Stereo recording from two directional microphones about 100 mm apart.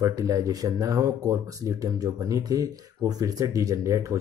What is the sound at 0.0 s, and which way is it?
Speech, 35° right (ahead or behind).